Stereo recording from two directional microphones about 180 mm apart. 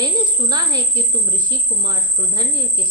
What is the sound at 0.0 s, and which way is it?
A woman's voice, 25° right (ahead or behind).